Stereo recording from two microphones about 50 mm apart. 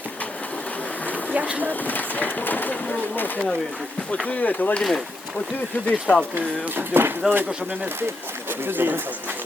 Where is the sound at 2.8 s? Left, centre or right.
Left.